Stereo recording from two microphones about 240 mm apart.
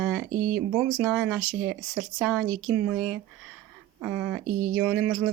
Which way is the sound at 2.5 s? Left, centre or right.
Right.